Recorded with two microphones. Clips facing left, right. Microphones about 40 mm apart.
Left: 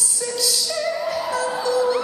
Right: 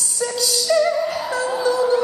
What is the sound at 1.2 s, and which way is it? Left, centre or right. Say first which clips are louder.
Music: right 1 dB; centre.